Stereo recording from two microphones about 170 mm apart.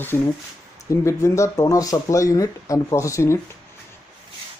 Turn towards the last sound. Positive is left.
turn(degrees=15)  # may be behind; listen again after turning